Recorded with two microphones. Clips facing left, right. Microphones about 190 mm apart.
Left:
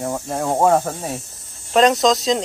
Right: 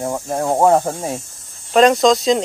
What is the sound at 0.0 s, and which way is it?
Speech, 10° right (ahead or behind).